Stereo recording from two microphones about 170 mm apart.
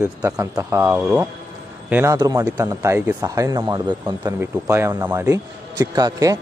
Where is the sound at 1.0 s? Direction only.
5° right (ahead or behind); by 6.3 s 20° right (ahead or behind).